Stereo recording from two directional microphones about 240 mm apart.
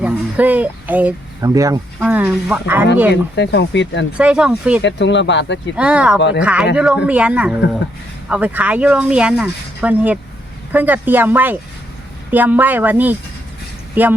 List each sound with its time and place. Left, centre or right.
0.0 s speech: centre
3.1 s speech: left
4.2 s speech: centre
4.8 s speech: left
5.7 s speech: centre
6.1 s speech: left
6.4 s speech: centre